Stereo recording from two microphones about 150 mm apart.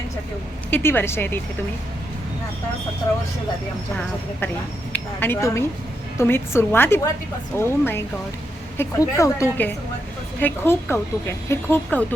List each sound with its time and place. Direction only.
0.7 s speech: 15° left (ahead or behind)
4.9 s speech: 10° left (ahead or behind)